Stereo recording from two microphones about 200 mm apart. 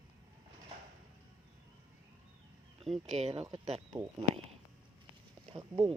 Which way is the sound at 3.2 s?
30° right (ahead or behind).